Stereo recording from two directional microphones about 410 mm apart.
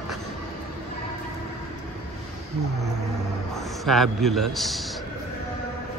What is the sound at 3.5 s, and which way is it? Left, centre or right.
A man's voice, centre.